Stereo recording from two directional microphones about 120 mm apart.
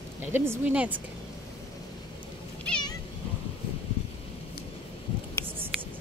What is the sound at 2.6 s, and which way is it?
Cat, 10° left (ahead or behind).